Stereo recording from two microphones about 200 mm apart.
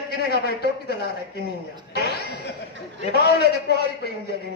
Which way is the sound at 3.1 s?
55° left (ahead or behind).